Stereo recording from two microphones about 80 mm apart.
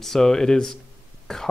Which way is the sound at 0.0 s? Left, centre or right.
Centre.